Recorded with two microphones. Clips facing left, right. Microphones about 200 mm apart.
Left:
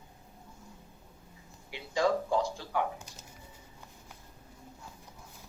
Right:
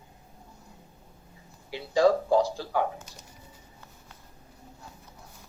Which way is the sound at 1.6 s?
35° right (ahead or behind).